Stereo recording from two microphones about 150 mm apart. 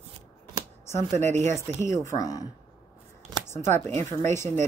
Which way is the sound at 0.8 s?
15° left (ahead or behind).